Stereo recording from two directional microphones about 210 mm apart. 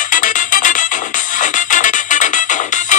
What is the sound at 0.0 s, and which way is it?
Music, 40° left (ahead or behind).